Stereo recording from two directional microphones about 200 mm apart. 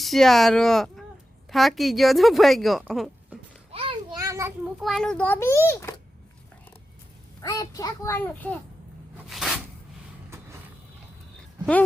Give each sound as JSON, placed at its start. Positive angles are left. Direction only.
{"t": 0.0, "sound": "speech", "side_deg": 0}
{"t": 3.7, "sound": "a sound", "side_deg": -30}
{"t": 4.8, "sound": "a child's voice", "side_deg": 0}
{"t": 7.4, "sound": "a child's voice", "side_deg": 15}